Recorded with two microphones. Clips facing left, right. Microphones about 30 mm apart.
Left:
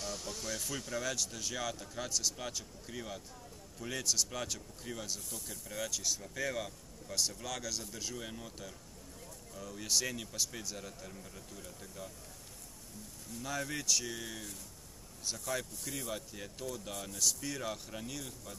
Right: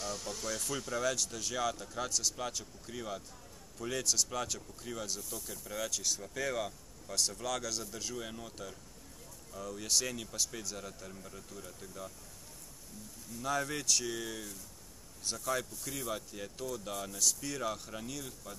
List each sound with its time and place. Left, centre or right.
0.0 s speech: centre
13.3 s speech: centre